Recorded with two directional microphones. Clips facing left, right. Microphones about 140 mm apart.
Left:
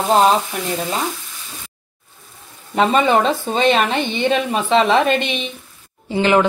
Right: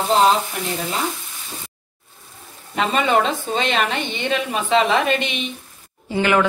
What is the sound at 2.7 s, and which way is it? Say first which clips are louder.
A woman's voice: left 4 dB; 40° left (ahead or behind).